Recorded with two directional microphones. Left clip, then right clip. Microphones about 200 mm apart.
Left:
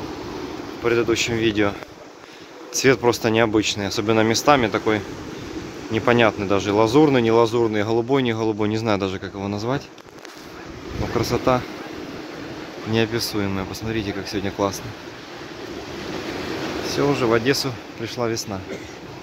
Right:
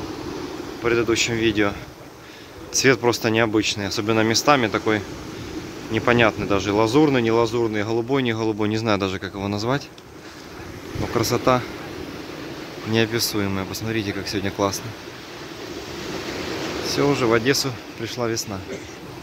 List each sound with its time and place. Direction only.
0.8 s speech: centre (ahead or behind)
11.1 s speech: 5° right (ahead or behind)
12.9 s speech: centre (ahead or behind)
16.0 s train: 50° left (ahead or behind)
16.8 s speech: 5° right (ahead or behind)